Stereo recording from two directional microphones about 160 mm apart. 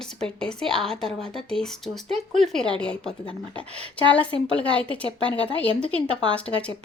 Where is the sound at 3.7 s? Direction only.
40° right (ahead or behind).